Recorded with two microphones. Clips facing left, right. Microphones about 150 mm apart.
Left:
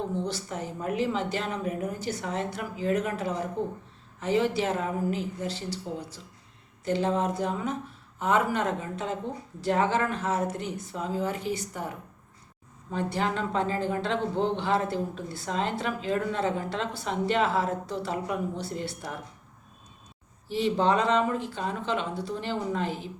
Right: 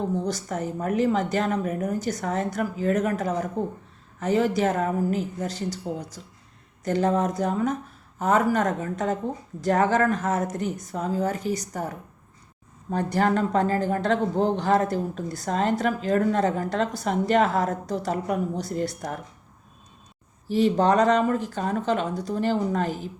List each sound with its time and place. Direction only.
0.3 s speech: 45° right (ahead or behind)
20.5 s speech: 40° right (ahead or behind)